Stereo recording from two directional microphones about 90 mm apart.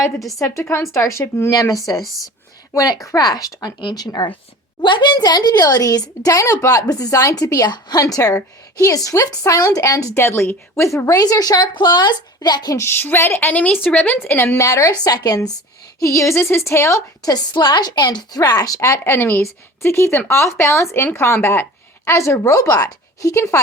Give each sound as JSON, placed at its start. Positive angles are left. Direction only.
{"t": 0.3, "sound": "a woman's voice", "side_deg": 35}
{"t": 4.8, "sound": "a woman's voice", "side_deg": 65}
{"t": 8.0, "sound": "a woman's voice", "side_deg": 35}
{"t": 12.7, "sound": "speech", "side_deg": 25}
{"t": 13.5, "sound": "speech", "side_deg": 15}
{"t": 16.0, "sound": "a woman's voice", "side_deg": 35}